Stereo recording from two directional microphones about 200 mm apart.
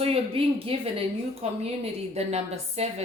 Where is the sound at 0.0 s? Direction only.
30° right (ahead or behind).